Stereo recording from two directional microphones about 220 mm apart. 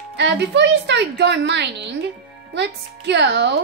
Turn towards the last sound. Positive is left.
turn(degrees=-50)  # may be behind; listen again after turning